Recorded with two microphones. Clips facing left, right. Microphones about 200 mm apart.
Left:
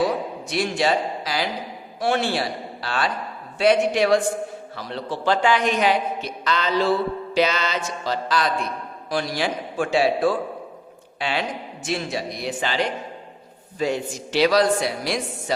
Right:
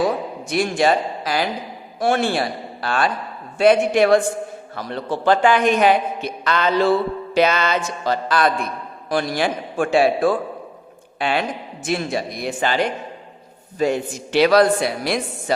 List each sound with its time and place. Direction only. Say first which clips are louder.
0.4 s a man's voice: right 5 dB; 50° right (ahead or behind)